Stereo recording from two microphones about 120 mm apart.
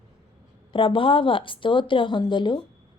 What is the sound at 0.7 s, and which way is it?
A woman's voice, 45° left (ahead or behind).